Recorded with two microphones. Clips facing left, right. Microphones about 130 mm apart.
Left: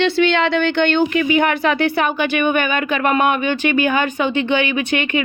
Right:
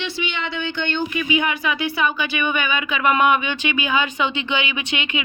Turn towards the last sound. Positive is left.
turn(degrees=50)  # may be behind; listen again after turning